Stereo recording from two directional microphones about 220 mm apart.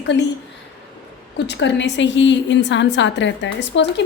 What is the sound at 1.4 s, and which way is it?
A woman's voice, 50° left (ahead or behind).